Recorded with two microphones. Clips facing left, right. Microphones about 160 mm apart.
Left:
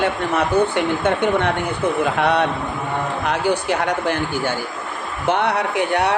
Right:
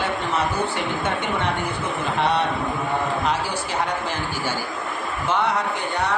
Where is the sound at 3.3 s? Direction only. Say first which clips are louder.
Left 5 dB; 65° left (ahead or behind).